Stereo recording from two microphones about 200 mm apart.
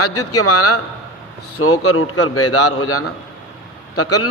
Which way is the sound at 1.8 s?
90° left.